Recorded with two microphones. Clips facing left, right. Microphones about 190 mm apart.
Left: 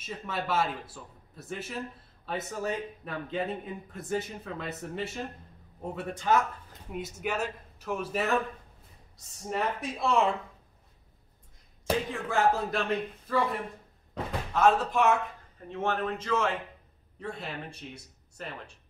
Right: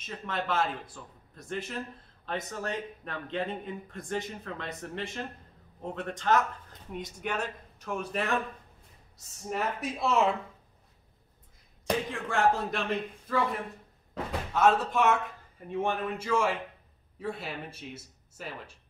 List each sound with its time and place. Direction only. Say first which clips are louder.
0.0 s a man's voice: even; 5° left (ahead or behind)
9.5 s a man's voice: left 1 dB; centre (ahead or behind)
11.8 s a man's voice: left 1 dB; centre (ahead or behind)
14.1 s speech: even; centre (ahead or behind)
15.7 s a man's voice: even; 10° right (ahead or behind)